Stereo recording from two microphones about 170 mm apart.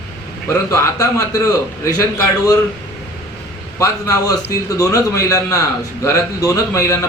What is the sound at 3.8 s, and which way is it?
A man's voice, 20° left (ahead or behind).